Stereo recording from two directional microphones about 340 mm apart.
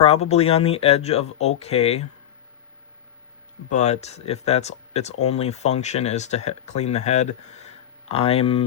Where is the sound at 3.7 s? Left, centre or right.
Centre.